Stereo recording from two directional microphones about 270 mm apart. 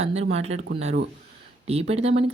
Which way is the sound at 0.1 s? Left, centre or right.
Right.